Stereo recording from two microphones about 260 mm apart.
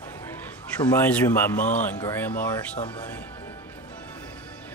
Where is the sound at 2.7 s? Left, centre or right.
Centre.